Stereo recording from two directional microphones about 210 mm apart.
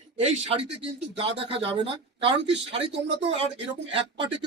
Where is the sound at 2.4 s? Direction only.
55° right (ahead or behind).